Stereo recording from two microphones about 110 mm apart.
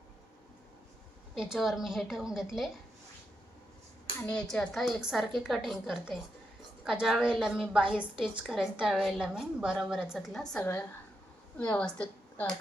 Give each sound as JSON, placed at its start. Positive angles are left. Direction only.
{"t": 1.4, "sound": "a woman's voice", "side_deg": -5}
{"t": 4.3, "sound": "a woman's voice", "side_deg": 10}
{"t": 10.6, "sound": "a woman's voice", "side_deg": 20}